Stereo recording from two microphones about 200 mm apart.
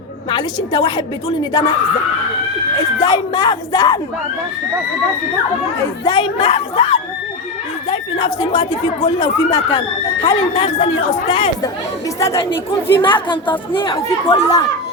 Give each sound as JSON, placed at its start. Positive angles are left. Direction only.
{"t": 0.3, "sound": "speech", "side_deg": 25}
{"t": 3.0, "sound": "speech", "side_deg": 20}
{"t": 6.1, "sound": "speech", "side_deg": 25}
{"t": 12.2, "sound": "speech", "side_deg": 15}